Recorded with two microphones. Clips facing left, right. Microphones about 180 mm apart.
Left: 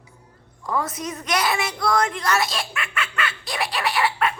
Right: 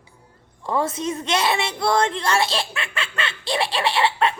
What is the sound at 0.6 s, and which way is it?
A woman's voice, 30° right (ahead or behind).